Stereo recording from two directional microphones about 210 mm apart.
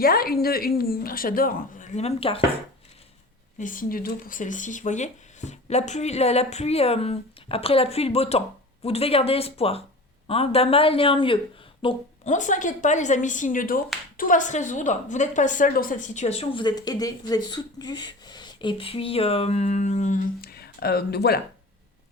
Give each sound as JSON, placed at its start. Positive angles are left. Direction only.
{"t": 0.0, "sound": "a woman's voice", "side_deg": 45}
{"t": 3.6, "sound": "a woman's voice", "side_deg": 40}